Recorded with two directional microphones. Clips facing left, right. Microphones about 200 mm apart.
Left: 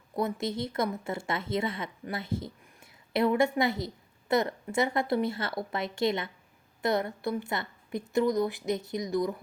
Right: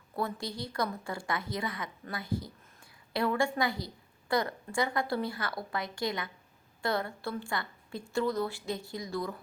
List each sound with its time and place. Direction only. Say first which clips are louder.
0.2 s a woman's voice: left 5 dB; 20° left (ahead or behind)